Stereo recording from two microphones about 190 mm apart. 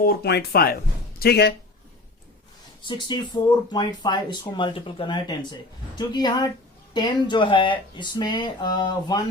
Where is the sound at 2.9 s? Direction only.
25° left (ahead or behind).